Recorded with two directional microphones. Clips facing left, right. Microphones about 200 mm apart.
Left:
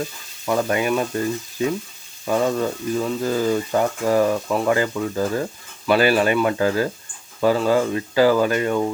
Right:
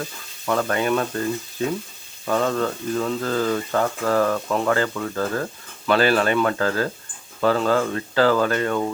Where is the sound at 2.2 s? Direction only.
15° left (ahead or behind).